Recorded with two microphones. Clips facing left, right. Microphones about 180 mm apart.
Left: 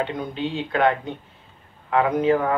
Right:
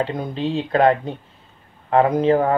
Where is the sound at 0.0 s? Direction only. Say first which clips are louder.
Right 3 dB; 35° right (ahead or behind).